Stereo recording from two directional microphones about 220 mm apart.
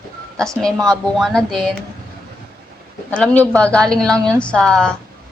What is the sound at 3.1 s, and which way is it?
A woman's voice, 5° left (ahead or behind).